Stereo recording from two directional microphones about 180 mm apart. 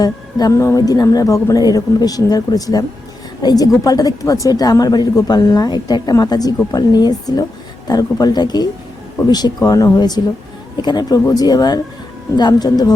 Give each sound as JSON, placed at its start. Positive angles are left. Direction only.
{"t": 0.0, "sound": "speech", "side_deg": 20}